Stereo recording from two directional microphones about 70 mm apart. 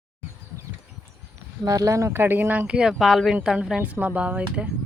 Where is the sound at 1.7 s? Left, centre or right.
Right.